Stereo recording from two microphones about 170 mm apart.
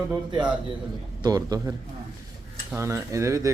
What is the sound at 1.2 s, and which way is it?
A man's voice, 20° right (ahead or behind).